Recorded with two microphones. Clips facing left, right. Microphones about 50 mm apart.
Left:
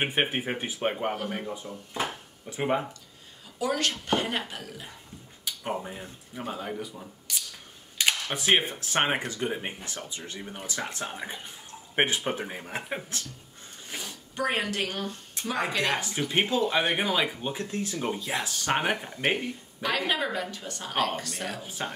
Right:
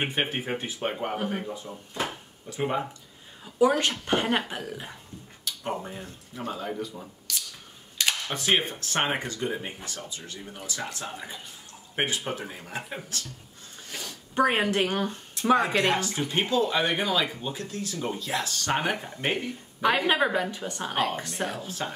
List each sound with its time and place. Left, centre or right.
0.0 s speech: centre
3.5 s speech: right
5.4 s speech: centre
8.0 s cutlery: centre
9.3 s speech: left
13.8 s a sound: centre
14.3 s speech: right
15.4 s a sound: left
15.7 s speech: right
16.0 s speech: centre
19.8 s speech: right
21.6 s speech: centre